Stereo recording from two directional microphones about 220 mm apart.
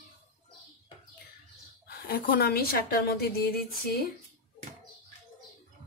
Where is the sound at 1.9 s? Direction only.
45° left (ahead or behind).